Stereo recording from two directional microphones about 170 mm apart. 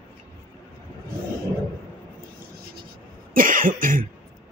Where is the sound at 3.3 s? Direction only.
55° right (ahead or behind).